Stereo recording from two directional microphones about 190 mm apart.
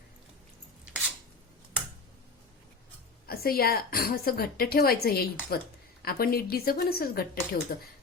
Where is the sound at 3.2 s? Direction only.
50° left (ahead or behind).